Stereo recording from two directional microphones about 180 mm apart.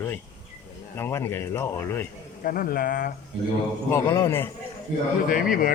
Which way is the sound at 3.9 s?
15° left (ahead or behind).